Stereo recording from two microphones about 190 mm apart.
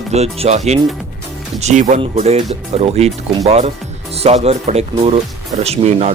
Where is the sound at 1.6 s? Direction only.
40° right (ahead or behind).